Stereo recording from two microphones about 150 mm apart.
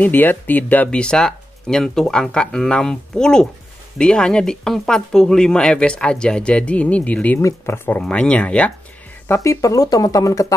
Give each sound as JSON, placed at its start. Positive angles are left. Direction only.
{"t": 0.0, "sound": "speech", "side_deg": 10}
{"t": 9.3, "sound": "speech", "side_deg": 20}